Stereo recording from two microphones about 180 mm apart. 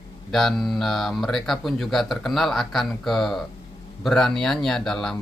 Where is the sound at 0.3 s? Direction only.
Centre (ahead or behind).